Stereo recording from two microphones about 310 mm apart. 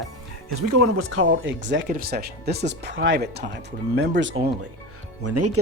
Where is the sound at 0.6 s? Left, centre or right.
Right.